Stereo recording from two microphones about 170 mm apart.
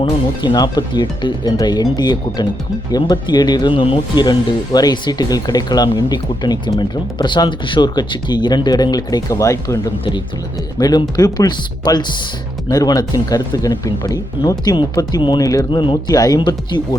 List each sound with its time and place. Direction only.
0.0 s speech: 25° left (ahead or behind)